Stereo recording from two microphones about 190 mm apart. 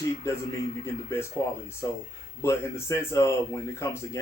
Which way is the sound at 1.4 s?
15° left (ahead or behind).